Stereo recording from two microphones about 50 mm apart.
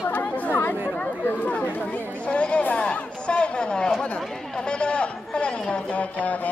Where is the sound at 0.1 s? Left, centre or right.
Left.